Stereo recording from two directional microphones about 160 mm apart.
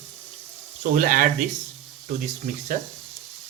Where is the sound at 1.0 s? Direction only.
60° right (ahead or behind).